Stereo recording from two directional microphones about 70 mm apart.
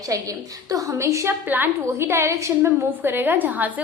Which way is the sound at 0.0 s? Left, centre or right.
Right.